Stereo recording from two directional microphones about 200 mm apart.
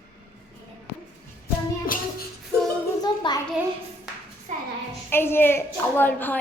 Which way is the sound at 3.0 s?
20° left (ahead or behind).